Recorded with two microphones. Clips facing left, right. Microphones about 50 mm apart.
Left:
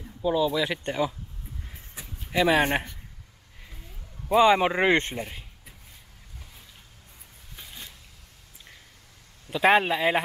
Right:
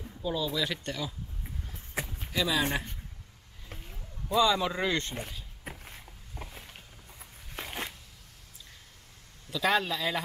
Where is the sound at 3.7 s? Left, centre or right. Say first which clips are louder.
Right 5 dB; right.